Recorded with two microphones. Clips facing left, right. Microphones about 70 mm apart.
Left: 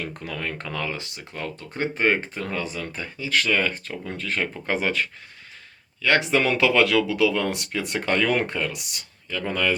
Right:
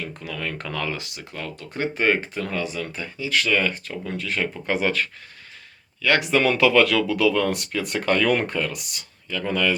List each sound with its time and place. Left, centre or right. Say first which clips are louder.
0.0 s speech: even; left
0.3 s speech: right 2 dB; left
9.5 s speech: right 1 dB; left